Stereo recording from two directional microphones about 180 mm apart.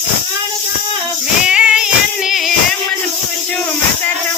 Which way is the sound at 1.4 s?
5° right (ahead or behind).